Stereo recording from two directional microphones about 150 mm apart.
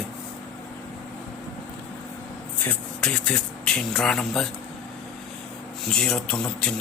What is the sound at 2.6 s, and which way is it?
Speech, 5° left (ahead or behind).